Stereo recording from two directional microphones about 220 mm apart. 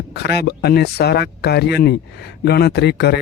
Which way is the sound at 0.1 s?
45° left (ahead or behind).